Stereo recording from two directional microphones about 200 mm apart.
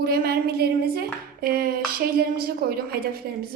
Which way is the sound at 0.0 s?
50° right (ahead or behind).